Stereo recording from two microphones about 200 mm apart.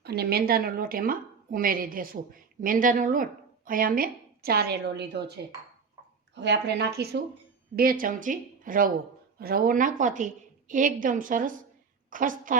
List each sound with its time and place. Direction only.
0.0 s a woman's voice: 55° right (ahead or behind)